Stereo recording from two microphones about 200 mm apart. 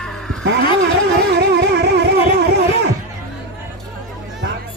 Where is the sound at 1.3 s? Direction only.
55° right (ahead or behind).